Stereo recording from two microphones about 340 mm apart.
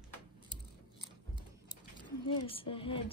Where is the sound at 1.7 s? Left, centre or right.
Centre.